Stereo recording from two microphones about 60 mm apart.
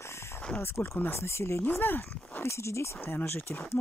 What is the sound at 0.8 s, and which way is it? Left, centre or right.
Speech, left.